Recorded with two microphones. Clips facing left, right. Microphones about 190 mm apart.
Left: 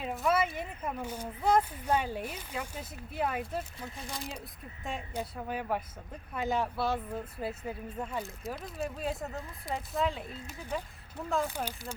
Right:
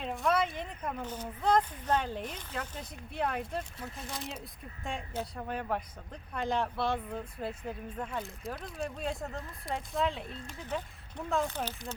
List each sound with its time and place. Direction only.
0.0 s speech: 5° left (ahead or behind)